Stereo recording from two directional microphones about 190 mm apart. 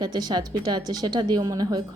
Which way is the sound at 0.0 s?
20° right (ahead or behind).